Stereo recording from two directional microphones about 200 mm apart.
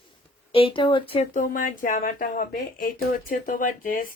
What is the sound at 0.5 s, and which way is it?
Speech, 25° left (ahead or behind).